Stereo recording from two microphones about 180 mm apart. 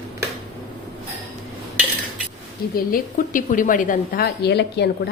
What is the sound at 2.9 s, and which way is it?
A woman's voice, 50° left (ahead or behind).